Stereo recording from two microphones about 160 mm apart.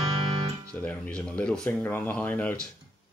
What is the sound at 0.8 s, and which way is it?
Speech, 5° left (ahead or behind).